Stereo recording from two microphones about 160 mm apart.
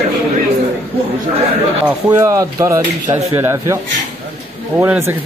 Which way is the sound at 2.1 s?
20° right (ahead or behind).